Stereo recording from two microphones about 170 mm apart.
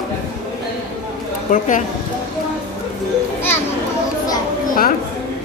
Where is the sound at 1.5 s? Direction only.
50° left (ahead or behind).